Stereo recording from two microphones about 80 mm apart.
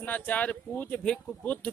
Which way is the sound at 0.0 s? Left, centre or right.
Centre.